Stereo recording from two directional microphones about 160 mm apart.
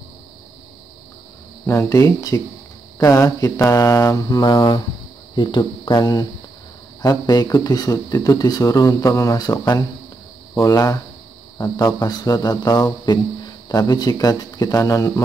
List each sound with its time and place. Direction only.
1.7 s speech: 20° left (ahead or behind)